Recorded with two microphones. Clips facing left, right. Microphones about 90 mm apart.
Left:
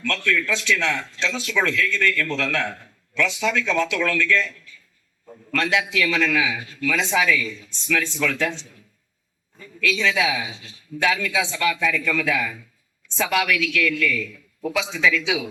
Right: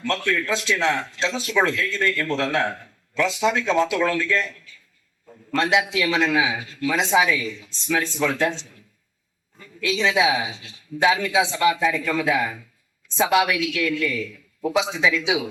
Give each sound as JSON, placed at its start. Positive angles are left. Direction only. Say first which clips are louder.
{"t": 0.0, "sound": "a man's voice", "louder": "even", "side_deg": -30}
{"t": 5.5, "sound": "speech", "louder": "right 2 dB", "side_deg": -25}
{"t": 9.8, "sound": "speech", "louder": "right 2 dB", "side_deg": -25}